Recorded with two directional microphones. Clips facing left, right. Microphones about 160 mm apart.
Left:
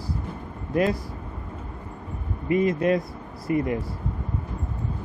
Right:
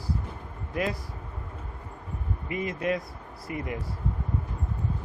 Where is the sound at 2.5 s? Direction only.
35° left (ahead or behind).